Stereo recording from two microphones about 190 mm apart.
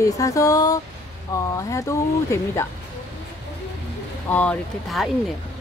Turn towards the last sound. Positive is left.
turn(degrees=0)  # may be behind; listen again after turning